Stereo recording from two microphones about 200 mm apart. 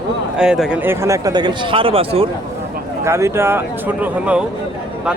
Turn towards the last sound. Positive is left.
turn(degrees=-5)  # may be behind; listen again after turning